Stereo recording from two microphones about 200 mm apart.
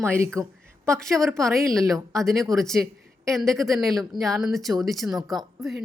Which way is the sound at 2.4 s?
Centre (ahead or behind).